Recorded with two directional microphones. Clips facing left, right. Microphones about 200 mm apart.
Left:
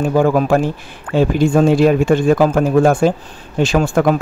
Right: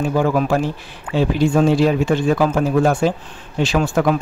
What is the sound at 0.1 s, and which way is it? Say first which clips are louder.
A man's voice: left 5 dB; 45° left (ahead or behind).